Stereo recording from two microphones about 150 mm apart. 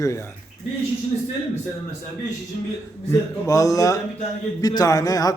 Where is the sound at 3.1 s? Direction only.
20° left (ahead or behind).